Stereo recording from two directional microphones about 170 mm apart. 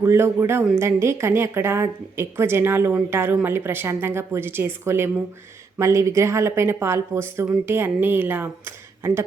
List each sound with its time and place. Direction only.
0.0 s a woman's voice: 15° right (ahead or behind)